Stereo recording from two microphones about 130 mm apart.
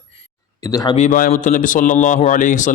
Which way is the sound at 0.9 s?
80° left.